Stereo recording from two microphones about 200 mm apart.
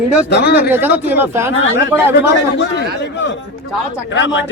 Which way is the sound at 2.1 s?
60° left (ahead or behind).